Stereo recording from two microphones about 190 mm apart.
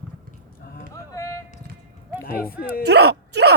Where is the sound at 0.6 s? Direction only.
55° left (ahead or behind).